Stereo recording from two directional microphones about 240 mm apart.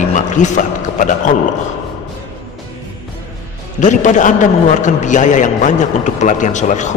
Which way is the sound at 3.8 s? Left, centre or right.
Left.